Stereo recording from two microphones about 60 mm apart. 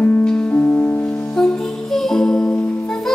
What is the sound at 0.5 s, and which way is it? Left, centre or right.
Music, left.